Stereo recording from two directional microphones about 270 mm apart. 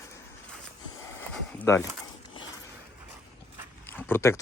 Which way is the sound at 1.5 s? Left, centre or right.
Centre.